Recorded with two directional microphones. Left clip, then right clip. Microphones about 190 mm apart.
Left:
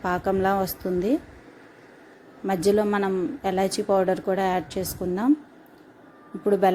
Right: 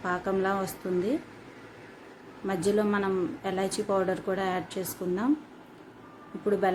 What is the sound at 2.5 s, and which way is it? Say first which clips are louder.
Speech: left 5 dB; 30° left (ahead or behind).